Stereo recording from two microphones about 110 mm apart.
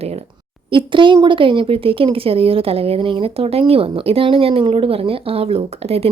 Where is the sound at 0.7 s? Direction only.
50° right (ahead or behind).